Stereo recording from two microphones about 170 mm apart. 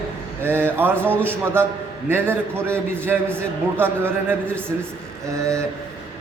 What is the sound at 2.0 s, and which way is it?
A man's voice, 15° right (ahead or behind).